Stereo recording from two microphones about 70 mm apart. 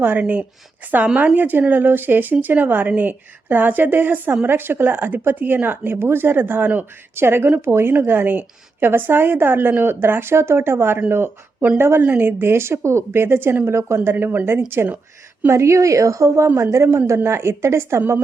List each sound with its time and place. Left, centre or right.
0.0 s speech: right
15.4 s a woman's voice: right